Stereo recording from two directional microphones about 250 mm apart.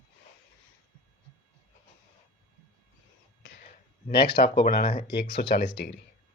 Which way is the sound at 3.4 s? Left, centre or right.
Left.